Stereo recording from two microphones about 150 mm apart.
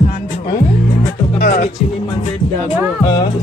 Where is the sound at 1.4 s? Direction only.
80° left.